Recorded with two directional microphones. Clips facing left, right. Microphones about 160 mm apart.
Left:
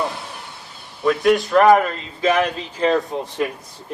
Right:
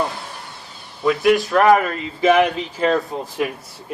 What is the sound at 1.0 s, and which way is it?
Speech, 5° right (ahead or behind).